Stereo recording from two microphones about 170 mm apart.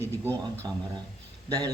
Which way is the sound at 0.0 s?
15° right (ahead or behind).